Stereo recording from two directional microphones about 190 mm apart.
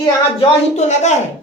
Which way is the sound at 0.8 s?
35° left (ahead or behind).